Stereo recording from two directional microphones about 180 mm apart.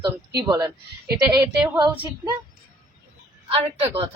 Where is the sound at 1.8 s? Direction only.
25° right (ahead or behind).